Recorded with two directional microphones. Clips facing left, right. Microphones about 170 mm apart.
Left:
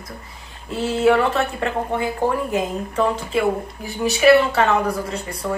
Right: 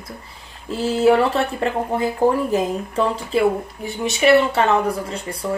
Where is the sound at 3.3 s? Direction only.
35° right (ahead or behind).